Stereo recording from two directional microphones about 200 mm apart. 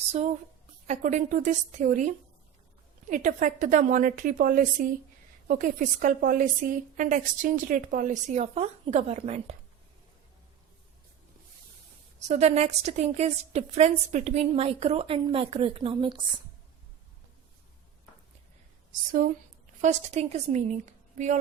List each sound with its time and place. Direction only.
0.1 s a woman's voice: 35° right (ahead or behind)
12.3 s a woman's voice: 35° right (ahead or behind)
19.8 s a woman's voice: 35° right (ahead or behind)